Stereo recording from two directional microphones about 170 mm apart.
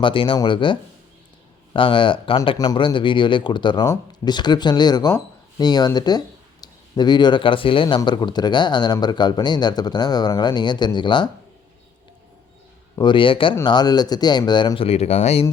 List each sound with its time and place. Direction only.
0.0 s speech: 30° left (ahead or behind)
13.0 s speech: 30° left (ahead or behind)